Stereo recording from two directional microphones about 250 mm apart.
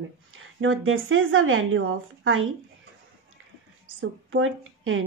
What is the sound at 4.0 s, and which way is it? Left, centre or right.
A woman's voice, right.